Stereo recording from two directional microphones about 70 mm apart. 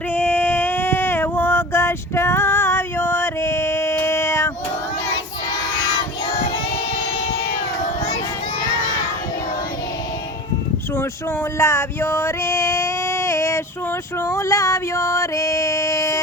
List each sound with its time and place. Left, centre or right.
0.1 s female singing: left
11.5 s a sound: left
14.2 s music: left